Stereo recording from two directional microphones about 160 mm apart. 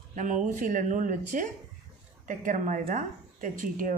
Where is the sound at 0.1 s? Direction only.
50° right (ahead or behind).